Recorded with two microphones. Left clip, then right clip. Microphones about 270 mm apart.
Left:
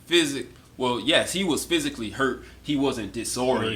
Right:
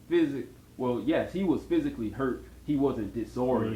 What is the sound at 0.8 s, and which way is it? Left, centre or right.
Speech, left.